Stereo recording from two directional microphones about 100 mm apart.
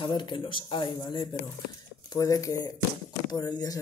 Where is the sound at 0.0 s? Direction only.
55° left (ahead or behind).